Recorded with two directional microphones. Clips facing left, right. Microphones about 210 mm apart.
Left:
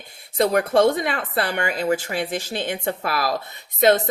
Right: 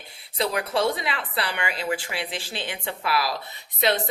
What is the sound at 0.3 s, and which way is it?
A woman's voice, 50° left (ahead or behind).